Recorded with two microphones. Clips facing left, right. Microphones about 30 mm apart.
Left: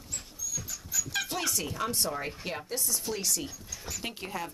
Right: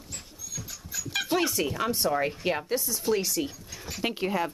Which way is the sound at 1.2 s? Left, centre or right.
Centre.